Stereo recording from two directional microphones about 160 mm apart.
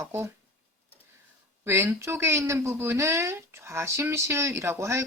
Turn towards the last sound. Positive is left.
turn(degrees=-15)  # may be behind; listen again after turning